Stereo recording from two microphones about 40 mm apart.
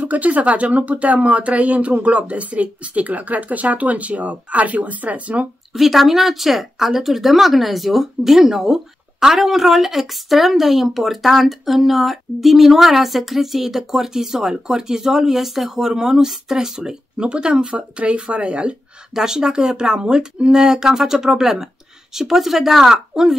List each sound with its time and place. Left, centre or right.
0.0 s speech: right
5.7 s speech: centre; by 18.8 s right
19.1 s speech: centre